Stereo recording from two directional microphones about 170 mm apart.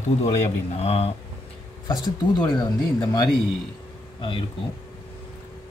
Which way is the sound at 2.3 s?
25° left (ahead or behind).